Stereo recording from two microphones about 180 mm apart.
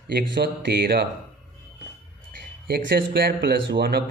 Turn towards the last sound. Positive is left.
turn(degrees=-70)  # may be behind; listen again after turning